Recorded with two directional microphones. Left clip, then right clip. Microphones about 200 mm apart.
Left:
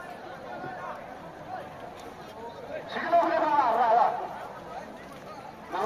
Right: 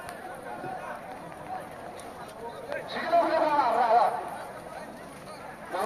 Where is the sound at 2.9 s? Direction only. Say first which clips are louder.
Left 1 dB; 50° right (ahead or behind).